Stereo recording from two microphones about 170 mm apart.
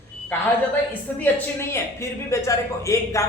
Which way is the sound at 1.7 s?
15° left (ahead or behind).